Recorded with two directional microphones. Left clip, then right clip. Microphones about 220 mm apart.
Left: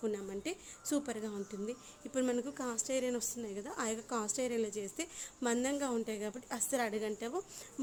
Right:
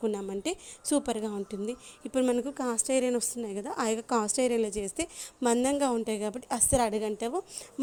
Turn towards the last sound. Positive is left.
turn(degrees=-25)  # may be behind; listen again after turning